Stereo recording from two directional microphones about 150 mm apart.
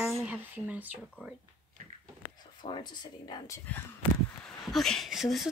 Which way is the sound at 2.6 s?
30° left (ahead or behind).